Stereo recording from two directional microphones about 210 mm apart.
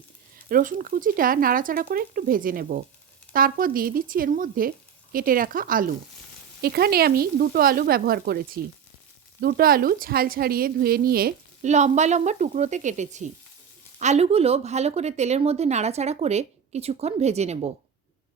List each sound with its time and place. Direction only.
0.5 s a woman's voice: 40° right (ahead or behind)